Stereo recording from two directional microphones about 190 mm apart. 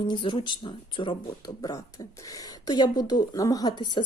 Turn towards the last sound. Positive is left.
turn(degrees=25)  # may be behind; listen again after turning